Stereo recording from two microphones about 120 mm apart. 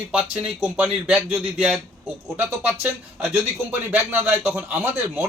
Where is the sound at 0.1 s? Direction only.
10° right (ahead or behind).